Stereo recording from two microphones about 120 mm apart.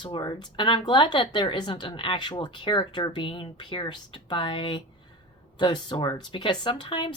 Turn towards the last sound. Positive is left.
turn(degrees=45)  # may be behind; listen again after turning